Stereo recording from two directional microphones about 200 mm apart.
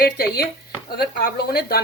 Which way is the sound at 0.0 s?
50° left (ahead or behind).